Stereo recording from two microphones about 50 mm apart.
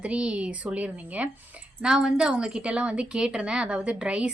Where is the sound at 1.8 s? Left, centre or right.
Centre.